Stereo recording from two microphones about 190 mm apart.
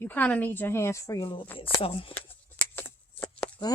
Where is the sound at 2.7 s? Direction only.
15° left (ahead or behind).